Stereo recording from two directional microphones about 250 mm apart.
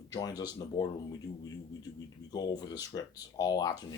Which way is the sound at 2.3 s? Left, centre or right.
Centre.